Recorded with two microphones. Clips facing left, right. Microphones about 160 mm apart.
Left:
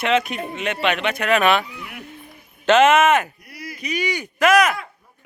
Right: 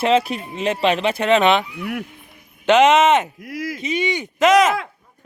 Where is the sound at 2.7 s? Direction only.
15° right (ahead or behind).